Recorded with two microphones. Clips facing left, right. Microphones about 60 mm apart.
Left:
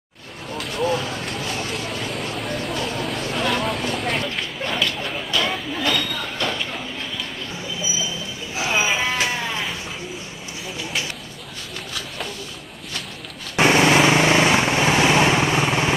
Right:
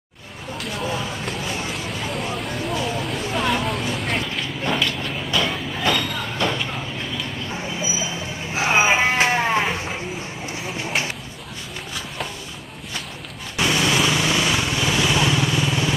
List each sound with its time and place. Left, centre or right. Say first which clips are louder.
0.6 s vehicle: left 4 dB; centre
1.7 s a sound: even; centre
5.3 s train: even; centre
8.5 s sheep: right 4 dB; right
13.6 s vehicle: left 5 dB; left